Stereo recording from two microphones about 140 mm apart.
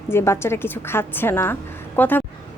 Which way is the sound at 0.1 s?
15° left (ahead or behind).